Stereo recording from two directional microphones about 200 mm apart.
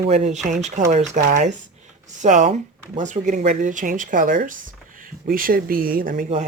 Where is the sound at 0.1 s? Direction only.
35° right (ahead or behind).